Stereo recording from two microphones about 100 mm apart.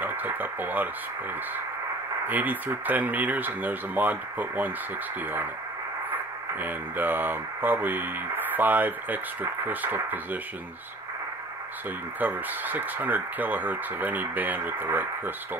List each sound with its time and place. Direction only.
0.0 s speech: 20° right (ahead or behind)
2.2 s speech: 15° right (ahead or behind)
6.0 s speech: 20° right (ahead or behind)
12.2 s speech: 15° right (ahead or behind)